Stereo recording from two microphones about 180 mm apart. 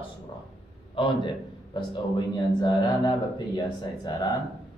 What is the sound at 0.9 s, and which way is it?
A man's voice, 25° left (ahead or behind).